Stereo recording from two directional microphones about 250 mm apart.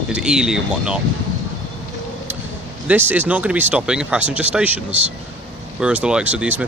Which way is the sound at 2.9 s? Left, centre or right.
Centre.